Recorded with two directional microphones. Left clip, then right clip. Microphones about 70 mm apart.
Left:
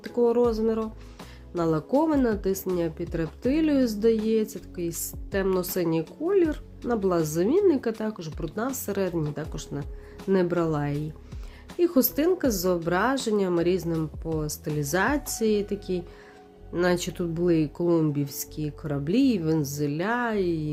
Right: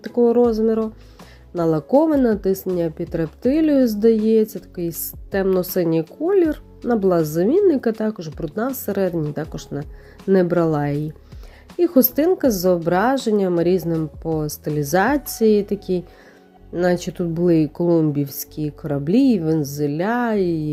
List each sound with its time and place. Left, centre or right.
0.0 s speech: right
9.3 s speech: right
10.4 s speech: right
11.8 s speech: right
14.3 s speech: right
16.8 s speech: right
17.3 s speech: right